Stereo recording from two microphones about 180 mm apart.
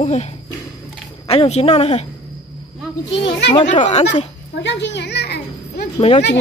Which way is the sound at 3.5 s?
30° left (ahead or behind).